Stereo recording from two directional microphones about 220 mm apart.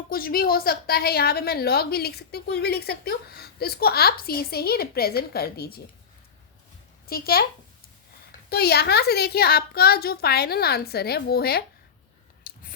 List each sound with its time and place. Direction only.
0.1 s a woman's voice: 40° left (ahead or behind)
7.1 s a woman's voice: 45° left (ahead or behind)
8.4 s a woman's voice: 45° left (ahead or behind)
12.4 s biting: 40° left (ahead or behind)